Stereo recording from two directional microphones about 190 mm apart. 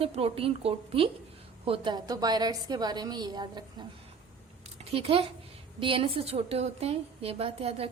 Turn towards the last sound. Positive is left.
turn(degrees=-30)  # may be behind; listen again after turning